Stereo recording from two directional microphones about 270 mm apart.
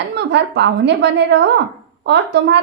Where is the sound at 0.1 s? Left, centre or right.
Right.